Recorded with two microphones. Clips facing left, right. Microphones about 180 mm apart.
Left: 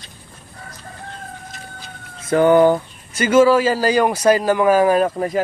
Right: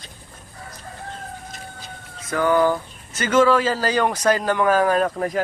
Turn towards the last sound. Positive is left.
turn(degrees=5)  # may be behind; listen again after turning